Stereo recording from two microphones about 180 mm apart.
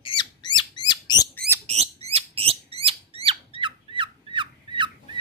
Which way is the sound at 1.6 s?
35° right (ahead or behind).